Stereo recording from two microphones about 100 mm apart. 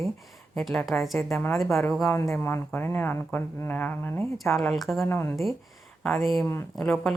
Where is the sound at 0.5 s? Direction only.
5° left (ahead or behind).